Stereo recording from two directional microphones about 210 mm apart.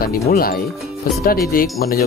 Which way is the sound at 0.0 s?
45° left (ahead or behind).